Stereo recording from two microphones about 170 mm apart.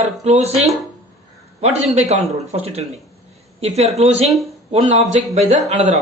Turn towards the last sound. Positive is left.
turn(degrees=-40)  # may be behind; listen again after turning